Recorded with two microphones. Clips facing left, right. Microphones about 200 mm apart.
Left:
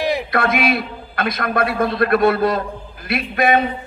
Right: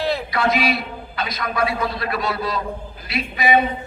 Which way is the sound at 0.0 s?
15° left (ahead or behind).